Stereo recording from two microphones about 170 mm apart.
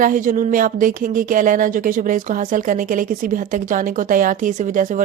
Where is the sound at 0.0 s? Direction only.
50° right (ahead or behind).